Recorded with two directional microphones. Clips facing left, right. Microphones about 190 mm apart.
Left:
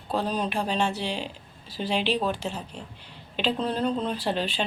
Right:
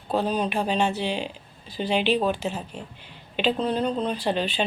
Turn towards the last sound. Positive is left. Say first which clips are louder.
# right 3 dB
turn(degrees=0)  # may be behind; listen again after turning